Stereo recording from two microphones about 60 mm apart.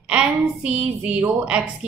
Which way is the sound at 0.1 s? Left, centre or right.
Centre.